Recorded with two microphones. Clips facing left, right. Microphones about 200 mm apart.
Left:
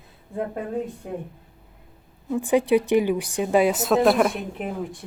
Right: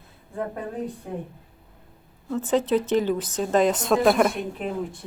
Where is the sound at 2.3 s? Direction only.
15° left (ahead or behind).